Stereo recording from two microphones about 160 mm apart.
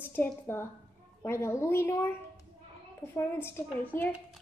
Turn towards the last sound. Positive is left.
turn(degrees=10)  # may be behind; listen again after turning